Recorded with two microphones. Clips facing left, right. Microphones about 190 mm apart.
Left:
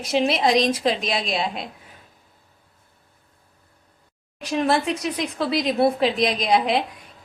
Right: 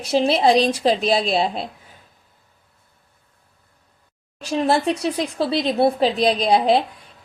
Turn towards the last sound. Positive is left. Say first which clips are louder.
# right 4 dB
turn(degrees=-30)  # may be behind; listen again after turning